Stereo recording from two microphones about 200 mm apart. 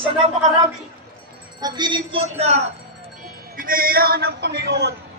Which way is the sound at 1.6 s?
20° right (ahead or behind).